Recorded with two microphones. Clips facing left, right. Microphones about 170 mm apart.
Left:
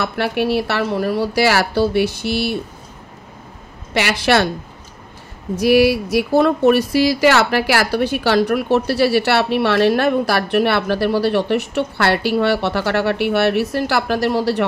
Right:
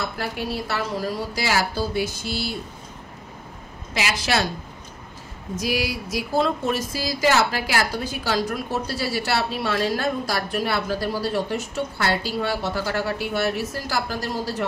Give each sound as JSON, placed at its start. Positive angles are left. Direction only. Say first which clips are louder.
{"t": 0.0, "sound": "speech", "louder": "left 9 dB", "side_deg": 70}
{"t": 3.9, "sound": "speech", "louder": "left 8 dB", "side_deg": 65}
{"t": 5.6, "sound": "speech", "louder": "left 13 dB", "side_deg": 65}